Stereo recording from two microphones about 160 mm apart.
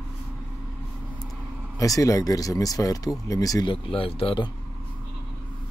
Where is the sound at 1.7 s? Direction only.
20° left (ahead or behind).